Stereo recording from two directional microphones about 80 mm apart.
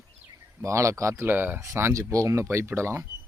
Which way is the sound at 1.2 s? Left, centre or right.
Right.